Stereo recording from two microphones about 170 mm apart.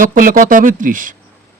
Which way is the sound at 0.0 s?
55° right (ahead or behind).